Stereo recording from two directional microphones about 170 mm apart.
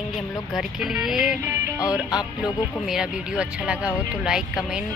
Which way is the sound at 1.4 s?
15° right (ahead or behind).